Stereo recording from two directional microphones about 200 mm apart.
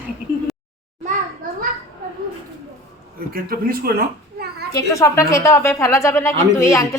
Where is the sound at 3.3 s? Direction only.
45° right (ahead or behind).